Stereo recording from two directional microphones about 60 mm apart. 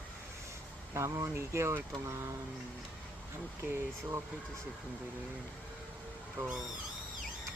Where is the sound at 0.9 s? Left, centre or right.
Right.